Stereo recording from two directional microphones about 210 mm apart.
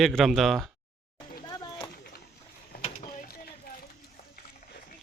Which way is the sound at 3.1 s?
45° left (ahead or behind).